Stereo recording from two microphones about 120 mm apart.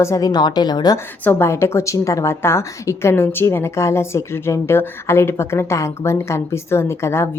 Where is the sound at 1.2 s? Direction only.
20° left (ahead or behind).